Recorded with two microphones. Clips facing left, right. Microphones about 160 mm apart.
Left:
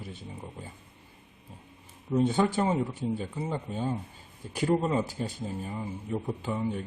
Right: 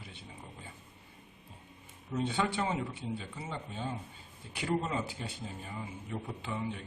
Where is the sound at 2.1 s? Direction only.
40° left (ahead or behind).